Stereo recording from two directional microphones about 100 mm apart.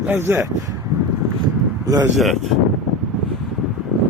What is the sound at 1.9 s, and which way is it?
Speech, 40° right (ahead or behind).